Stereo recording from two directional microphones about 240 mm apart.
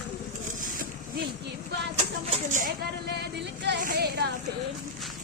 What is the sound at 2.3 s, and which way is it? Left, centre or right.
Speech, right.